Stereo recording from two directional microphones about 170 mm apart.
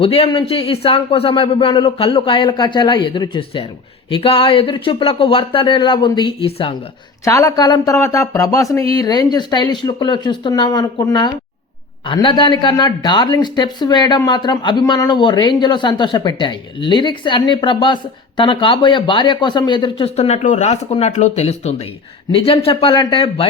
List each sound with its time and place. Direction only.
0.0 s a man's voice: 35° left (ahead or behind)
7.3 s a woman's voice: 20° left (ahead or behind)